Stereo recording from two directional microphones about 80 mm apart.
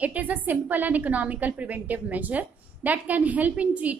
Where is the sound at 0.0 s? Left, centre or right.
Centre.